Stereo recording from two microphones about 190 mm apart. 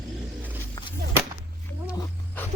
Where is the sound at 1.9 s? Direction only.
20° left (ahead or behind).